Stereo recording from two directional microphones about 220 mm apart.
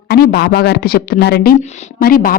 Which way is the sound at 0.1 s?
45° left (ahead or behind).